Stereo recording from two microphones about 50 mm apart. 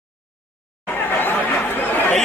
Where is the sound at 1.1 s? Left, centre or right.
Left.